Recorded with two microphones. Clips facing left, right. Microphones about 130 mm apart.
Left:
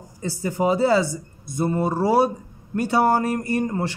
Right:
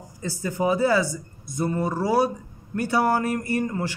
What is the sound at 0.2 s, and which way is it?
A man's voice, 20° left (ahead or behind).